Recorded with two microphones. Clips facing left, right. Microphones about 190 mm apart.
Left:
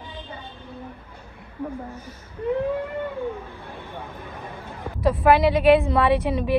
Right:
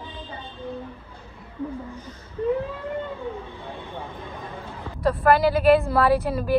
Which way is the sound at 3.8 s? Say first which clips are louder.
Right 1 dB; 10° left (ahead or behind).